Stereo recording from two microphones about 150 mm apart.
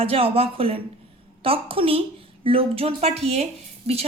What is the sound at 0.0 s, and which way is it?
A woman's voice, 40° right (ahead or behind).